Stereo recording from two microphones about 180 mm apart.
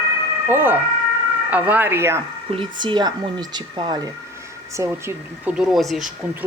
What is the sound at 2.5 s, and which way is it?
Speech, 30° right (ahead or behind).